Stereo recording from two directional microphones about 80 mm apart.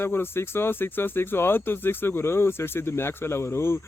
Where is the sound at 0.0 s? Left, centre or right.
Left.